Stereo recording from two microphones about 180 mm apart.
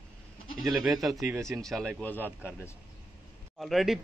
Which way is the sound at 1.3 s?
15° right (ahead or behind).